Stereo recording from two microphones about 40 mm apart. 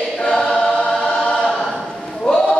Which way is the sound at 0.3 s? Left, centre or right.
Centre.